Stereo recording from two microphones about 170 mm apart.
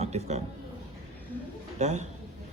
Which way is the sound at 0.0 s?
40° right (ahead or behind).